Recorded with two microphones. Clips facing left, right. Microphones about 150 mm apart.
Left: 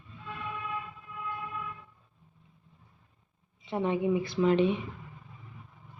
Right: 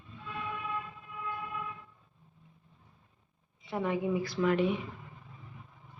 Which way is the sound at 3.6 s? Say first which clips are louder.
Left 3 dB; 25° left (ahead or behind).